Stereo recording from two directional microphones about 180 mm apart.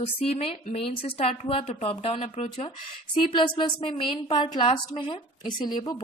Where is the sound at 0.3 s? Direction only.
35° left (ahead or behind).